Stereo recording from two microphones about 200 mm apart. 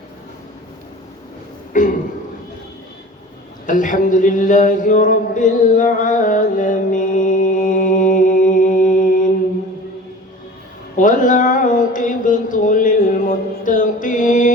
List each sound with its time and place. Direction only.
1.7 s speech: 40° left (ahead or behind)
3.7 s speech: 40° left (ahead or behind)
10.9 s a sound: 40° left (ahead or behind)